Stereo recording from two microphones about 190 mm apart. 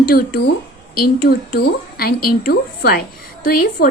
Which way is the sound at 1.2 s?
50° left (ahead or behind).